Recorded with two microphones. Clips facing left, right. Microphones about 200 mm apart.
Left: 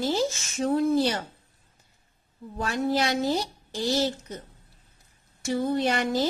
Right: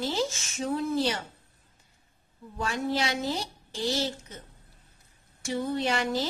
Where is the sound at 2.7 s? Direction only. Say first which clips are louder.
Left 4 dB; 40° left (ahead or behind).